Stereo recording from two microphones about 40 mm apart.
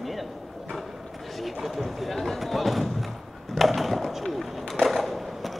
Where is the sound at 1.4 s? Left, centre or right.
Centre.